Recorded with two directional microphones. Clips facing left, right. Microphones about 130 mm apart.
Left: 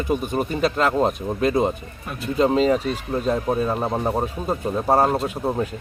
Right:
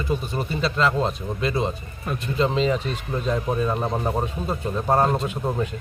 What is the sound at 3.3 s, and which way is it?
Speech, 5° left (ahead or behind).